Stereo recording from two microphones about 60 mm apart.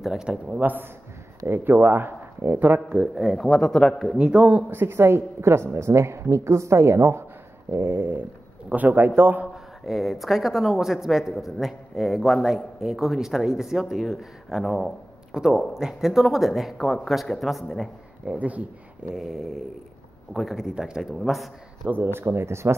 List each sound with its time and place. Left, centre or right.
0.2 s speech: centre
0.6 s speech: right
2.9 s speech: centre
3.3 s speech: centre
4.2 s speech: right
4.6 s a woman's voice: right
9.8 s a man's voice: centre
15.3 s a man's voice: centre
18.2 s speech: right
19.1 s a man's voice: centre
21.8 s a woman's voice: right